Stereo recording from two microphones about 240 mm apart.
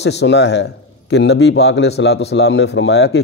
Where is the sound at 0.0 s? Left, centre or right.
Left.